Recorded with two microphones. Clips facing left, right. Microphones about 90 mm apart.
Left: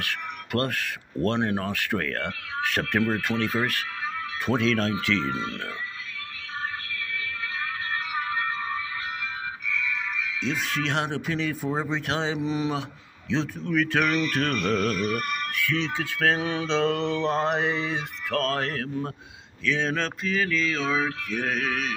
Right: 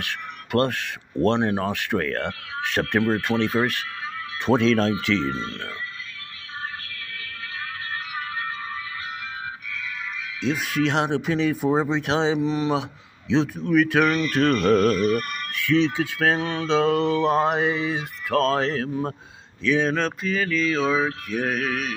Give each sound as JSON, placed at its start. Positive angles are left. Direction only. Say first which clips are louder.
{"t": 0.0, "sound": "speech", "louder": "even", "side_deg": -25}
{"t": 10.4, "sound": "mantra", "louder": "right 7 dB", "side_deg": -10}
{"t": 11.7, "sound": "speech", "louder": "right 6 dB", "side_deg": -25}
{"t": 12.4, "sound": "speech", "louder": "right 4 dB", "side_deg": 5}
{"t": 13.3, "sound": "speech", "louder": "right 6 dB", "side_deg": -15}
{"t": 16.3, "sound": "mantra", "louder": "right 1 dB", "side_deg": 15}
{"t": 16.6, "sound": "mantra", "louder": "right 6 dB", "side_deg": -5}
{"t": 18.4, "sound": "speech", "louder": "right 6 dB", "side_deg": -20}
{"t": 19.6, "sound": "mantra", "louder": "right 5 dB", "side_deg": -10}